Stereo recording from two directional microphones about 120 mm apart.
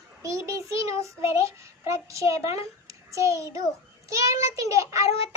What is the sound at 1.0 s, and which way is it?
A child's voice, 25° right (ahead or behind).